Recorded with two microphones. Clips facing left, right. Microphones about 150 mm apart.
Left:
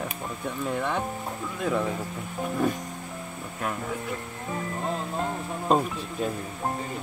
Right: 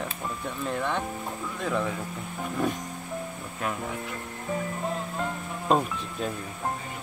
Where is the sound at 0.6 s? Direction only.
5° left (ahead or behind).